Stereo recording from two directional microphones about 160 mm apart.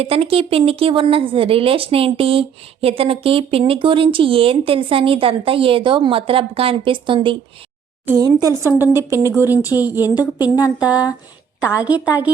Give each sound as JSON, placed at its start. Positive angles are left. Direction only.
{"t": 0.0, "sound": "a woman's voice", "side_deg": -35}
{"t": 10.2, "sound": "a woman's voice", "side_deg": 25}
{"t": 10.8, "sound": "a woman's voice", "side_deg": -10}